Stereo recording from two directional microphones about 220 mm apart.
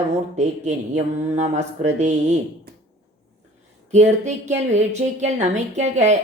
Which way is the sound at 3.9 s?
30° right (ahead or behind).